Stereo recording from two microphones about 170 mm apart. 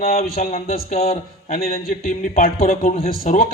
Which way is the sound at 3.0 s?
60° left (ahead or behind).